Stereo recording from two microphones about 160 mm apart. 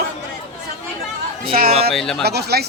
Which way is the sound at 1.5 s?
65° right (ahead or behind).